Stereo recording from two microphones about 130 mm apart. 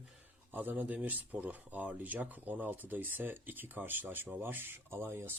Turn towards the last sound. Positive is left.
turn(degrees=-20)  # may be behind; listen again after turning